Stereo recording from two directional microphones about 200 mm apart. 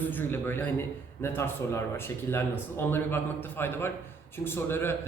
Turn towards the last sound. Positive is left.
turn(degrees=10)  # may be behind; listen again after turning